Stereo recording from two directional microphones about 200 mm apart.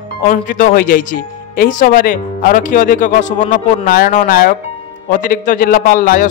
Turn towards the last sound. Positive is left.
turn(degrees=45)  # may be behind; listen again after turning